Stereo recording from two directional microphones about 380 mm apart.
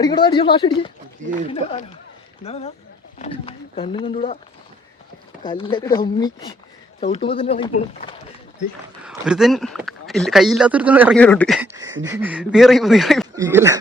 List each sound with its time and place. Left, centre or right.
0.0 s speech: centre
5.4 s speech: centre
9.0 s speech: centre